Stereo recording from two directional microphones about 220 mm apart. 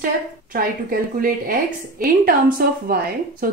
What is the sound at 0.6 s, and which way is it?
A woman's voice, 40° right (ahead or behind).